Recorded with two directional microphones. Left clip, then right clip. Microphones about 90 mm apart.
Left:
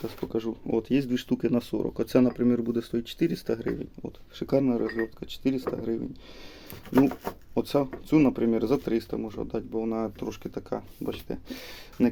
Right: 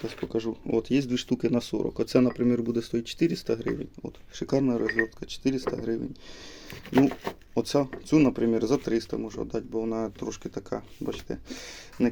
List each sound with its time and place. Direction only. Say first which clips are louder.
0.0 s speech: right 1 dB; 35° left (ahead or behind)
6.9 s speech: even; 40° left (ahead or behind)
7.5 s speech: even; 30° left (ahead or behind)